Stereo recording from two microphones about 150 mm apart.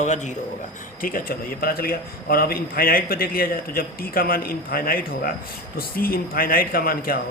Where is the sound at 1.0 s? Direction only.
70° left (ahead or behind).